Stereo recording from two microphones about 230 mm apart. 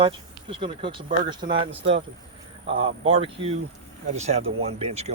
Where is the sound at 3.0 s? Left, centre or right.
Right.